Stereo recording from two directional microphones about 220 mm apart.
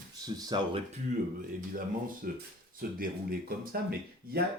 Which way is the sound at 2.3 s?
40° right (ahead or behind).